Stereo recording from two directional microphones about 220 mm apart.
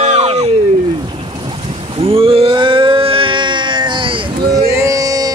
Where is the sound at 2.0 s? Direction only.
25° right (ahead or behind).